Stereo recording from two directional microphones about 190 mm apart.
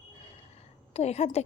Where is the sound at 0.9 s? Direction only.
35° left (ahead or behind).